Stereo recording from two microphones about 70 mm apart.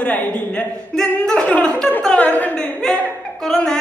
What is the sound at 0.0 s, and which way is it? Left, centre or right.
Speech, left.